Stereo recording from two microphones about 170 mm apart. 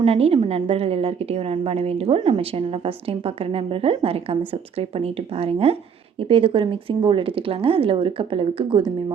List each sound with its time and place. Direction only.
0.0 s a woman's voice: 35° right (ahead or behind)